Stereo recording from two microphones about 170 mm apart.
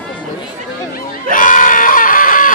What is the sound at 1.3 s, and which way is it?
Screaming, 50° left (ahead or behind).